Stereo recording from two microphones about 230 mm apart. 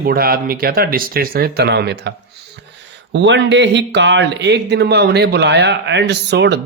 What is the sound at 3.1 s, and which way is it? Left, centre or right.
Speech, right.